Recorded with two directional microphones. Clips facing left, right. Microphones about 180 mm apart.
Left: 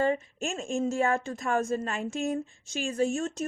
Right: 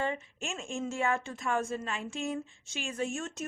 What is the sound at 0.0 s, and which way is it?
Speech, 40° left (ahead or behind).